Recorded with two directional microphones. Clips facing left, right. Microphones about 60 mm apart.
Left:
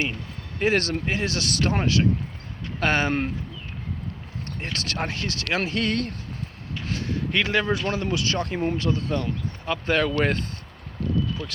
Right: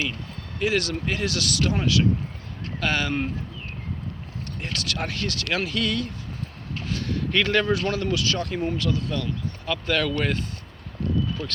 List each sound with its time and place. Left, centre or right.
0.6 s speech: left
1.0 s speech: left
4.6 s speech: left
6.8 s a sound: left
7.7 s speech: left